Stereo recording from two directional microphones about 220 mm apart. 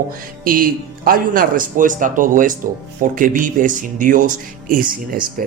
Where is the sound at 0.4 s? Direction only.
40° right (ahead or behind).